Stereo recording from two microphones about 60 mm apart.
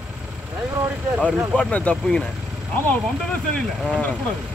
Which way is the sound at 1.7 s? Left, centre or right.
Left.